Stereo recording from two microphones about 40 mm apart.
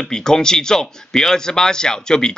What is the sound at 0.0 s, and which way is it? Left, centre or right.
Speech, centre.